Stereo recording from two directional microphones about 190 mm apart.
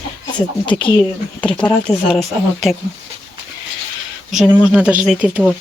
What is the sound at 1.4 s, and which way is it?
Speech, 5° left (ahead or behind).